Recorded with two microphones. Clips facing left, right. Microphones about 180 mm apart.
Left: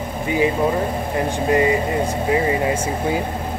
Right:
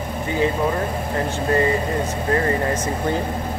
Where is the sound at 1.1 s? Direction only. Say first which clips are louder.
Left 2 dB; 15° left (ahead or behind).